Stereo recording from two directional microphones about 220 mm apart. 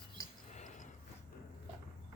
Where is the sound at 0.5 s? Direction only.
35° left (ahead or behind).